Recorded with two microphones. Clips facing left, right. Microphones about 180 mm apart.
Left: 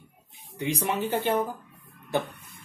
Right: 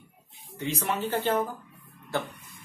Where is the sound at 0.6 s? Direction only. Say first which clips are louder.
Left 2 dB; 15° left (ahead or behind).